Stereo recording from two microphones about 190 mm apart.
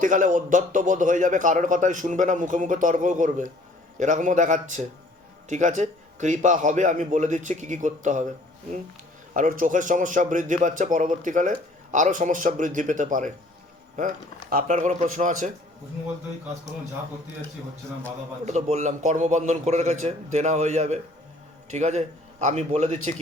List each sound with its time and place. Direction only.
0.0 s a man's voice: 45° right (ahead or behind)
9.3 s a man's voice: 45° right (ahead or behind)
18.4 s a man's voice: 40° right (ahead or behind)